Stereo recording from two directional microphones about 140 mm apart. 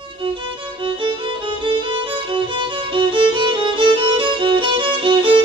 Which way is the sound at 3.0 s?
35° right (ahead or behind).